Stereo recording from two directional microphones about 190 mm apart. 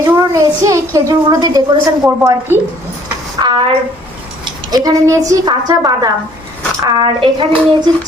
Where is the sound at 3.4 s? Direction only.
25° right (ahead or behind).